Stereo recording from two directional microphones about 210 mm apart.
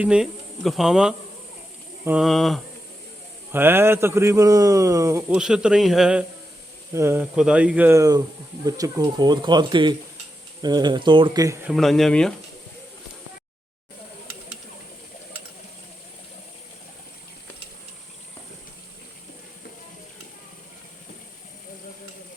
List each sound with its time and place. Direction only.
0.0 s speech: 5° right (ahead or behind)
3.5 s a man's voice: 10° right (ahead or behind)
5.4 s a man's voice: 5° right (ahead or behind)
11.7 s speech: centre (ahead or behind)